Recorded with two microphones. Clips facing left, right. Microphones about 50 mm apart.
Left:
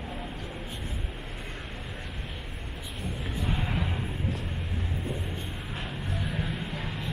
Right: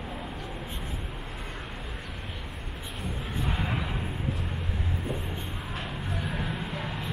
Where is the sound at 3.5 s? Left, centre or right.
Centre.